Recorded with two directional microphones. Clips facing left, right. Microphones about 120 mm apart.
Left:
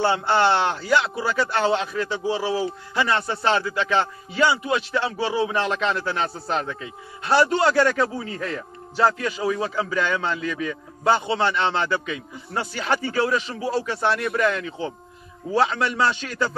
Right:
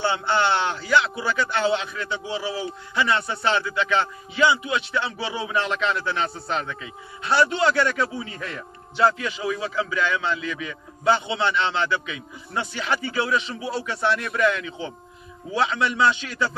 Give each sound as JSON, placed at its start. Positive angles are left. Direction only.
{"t": 0.0, "sound": "a man's voice", "side_deg": 40}